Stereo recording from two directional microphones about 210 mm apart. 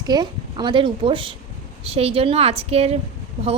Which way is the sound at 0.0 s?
20° right (ahead or behind).